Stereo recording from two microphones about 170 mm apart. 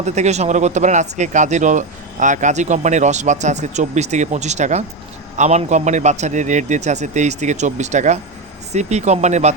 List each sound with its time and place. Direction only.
0.0 s speech: 40° right (ahead or behind)